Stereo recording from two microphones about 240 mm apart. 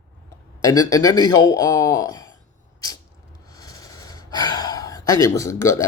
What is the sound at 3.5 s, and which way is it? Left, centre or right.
Gasp, centre.